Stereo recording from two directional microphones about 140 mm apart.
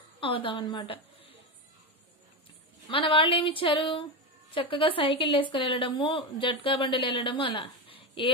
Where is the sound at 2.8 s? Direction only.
40° left (ahead or behind).